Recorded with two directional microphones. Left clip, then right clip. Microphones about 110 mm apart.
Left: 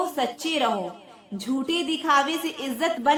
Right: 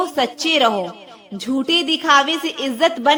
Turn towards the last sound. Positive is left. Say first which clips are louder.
# right 7 dB
turn(degrees=-25)  # may be behind; listen again after turning